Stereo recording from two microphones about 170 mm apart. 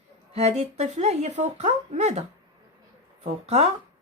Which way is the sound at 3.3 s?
40° right (ahead or behind).